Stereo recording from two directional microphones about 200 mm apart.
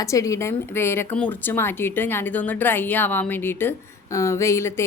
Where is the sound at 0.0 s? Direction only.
15° left (ahead or behind).